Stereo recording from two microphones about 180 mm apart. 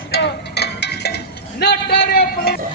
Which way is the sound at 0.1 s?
65° left (ahead or behind).